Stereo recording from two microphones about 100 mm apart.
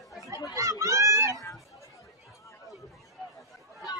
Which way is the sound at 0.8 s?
30° right (ahead or behind).